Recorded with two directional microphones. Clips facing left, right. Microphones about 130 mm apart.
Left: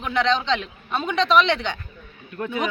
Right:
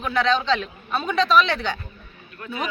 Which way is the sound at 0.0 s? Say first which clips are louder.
Even; 20° left (ahead or behind).